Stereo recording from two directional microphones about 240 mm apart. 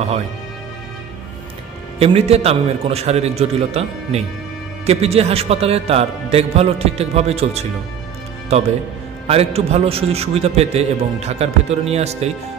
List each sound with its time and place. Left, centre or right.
2.0 s a man's voice: right